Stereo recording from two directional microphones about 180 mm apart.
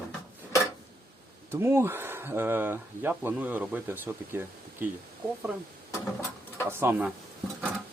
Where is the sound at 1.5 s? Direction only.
15° right (ahead or behind).